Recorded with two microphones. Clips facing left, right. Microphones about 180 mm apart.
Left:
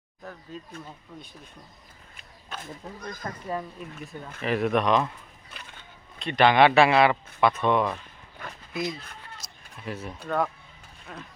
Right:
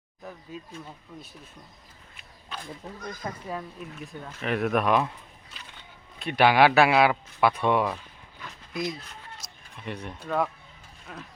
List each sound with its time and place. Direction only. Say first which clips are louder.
0.5 s speech: even; 10° right (ahead or behind)
3.4 s a man's voice: left 2 dB; centre (ahead or behind)
6.1 s a man's voice: left 1 dB; 5° right (ahead or behind)
8.4 s speech: left 3 dB; 55° left (ahead or behind)
8.7 s a man's voice: even; centre (ahead or behind)